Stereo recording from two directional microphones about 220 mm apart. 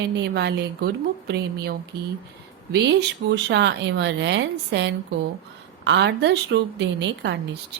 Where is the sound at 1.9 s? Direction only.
45° right (ahead or behind).